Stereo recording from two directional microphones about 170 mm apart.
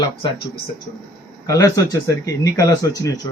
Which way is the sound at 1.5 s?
20° left (ahead or behind).